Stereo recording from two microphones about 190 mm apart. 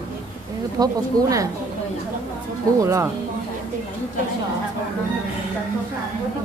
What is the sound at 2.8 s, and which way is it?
Speech, 15° right (ahead or behind).